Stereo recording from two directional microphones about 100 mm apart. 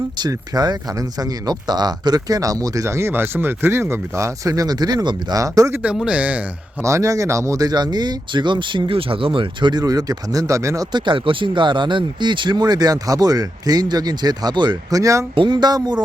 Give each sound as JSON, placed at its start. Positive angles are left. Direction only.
{"t": 0.2, "sound": "speech", "side_deg": -40}
{"t": 5.7, "sound": "a man's voice", "side_deg": -10}
{"t": 6.8, "sound": "speech", "side_deg": -30}
{"t": 10.9, "sound": "speech", "side_deg": -55}
{"t": 15.4, "sound": "speech", "side_deg": -50}